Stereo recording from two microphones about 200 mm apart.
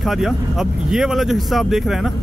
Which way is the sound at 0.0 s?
Centre (ahead or behind).